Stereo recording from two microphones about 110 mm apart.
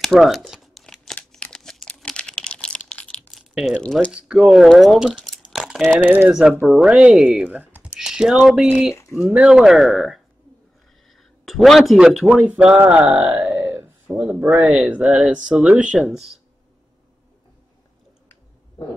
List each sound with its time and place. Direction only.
0.0 s crumpling: centre (ahead or behind)
3.3 s a sound: 5° right (ahead or behind)
3.7 s speech: 10° left (ahead or behind)
4.1 s speech: 10° right (ahead or behind)
5.5 s a sound: centre (ahead or behind)
6.0 s speech: 15° right (ahead or behind)
7.9 s typing: 5° right (ahead or behind)
8.4 s speech: 5° right (ahead or behind)
12.4 s speech: 10° right (ahead or behind)
13.4 s a sound: 20° right (ahead or behind)
14.5 s speech: 5° right (ahead or behind)